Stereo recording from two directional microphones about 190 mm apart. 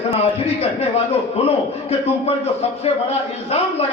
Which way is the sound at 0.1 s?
30° left (ahead or behind).